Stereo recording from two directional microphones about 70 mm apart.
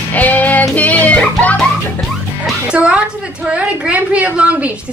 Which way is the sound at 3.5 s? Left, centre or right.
Centre.